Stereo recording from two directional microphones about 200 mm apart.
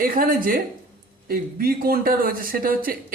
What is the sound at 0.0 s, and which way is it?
Speech, 45° right (ahead or behind).